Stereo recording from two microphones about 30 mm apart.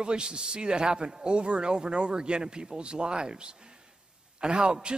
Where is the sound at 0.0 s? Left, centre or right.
Right.